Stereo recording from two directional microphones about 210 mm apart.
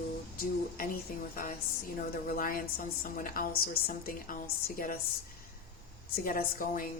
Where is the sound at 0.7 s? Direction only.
40° left (ahead or behind).